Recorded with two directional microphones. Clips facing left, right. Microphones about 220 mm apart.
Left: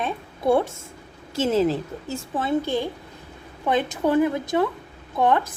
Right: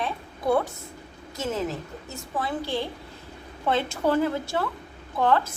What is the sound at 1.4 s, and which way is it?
A woman's voice, 30° left (ahead or behind).